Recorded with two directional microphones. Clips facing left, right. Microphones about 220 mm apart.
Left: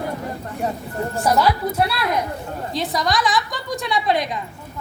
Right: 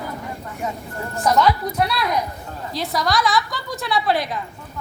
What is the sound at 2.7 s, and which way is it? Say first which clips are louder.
Speech: even; centre (ahead or behind).